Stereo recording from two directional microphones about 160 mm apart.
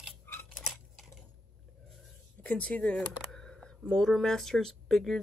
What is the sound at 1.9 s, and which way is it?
Speech, 5° left (ahead or behind).